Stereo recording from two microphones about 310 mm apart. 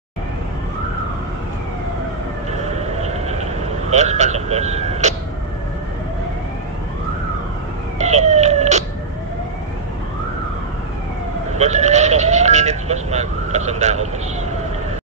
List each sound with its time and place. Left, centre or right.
3.0 s vehicle: right
8.0 s a sound: right
11.5 s speech: right